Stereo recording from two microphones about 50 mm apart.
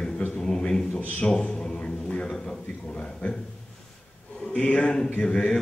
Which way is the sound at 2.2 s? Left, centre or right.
Centre.